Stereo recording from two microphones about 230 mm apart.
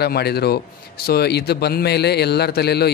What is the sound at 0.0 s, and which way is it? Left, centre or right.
Speech, left.